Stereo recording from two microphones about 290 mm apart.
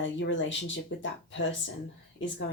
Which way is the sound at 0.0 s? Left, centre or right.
Left.